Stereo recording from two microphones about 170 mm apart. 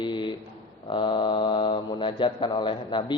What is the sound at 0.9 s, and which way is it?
A man's voice, 30° left (ahead or behind).